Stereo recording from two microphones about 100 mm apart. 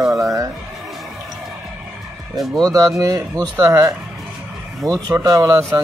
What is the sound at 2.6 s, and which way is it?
Speech, 35° right (ahead or behind).